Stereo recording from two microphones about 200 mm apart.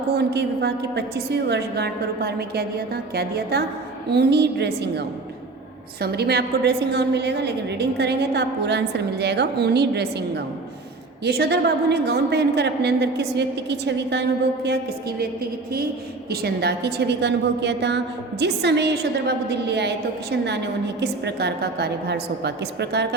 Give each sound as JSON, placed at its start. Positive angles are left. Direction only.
{"t": 0.1, "sound": "a woman's voice", "side_deg": -55}
{"t": 16.3, "sound": "a woman's voice", "side_deg": -55}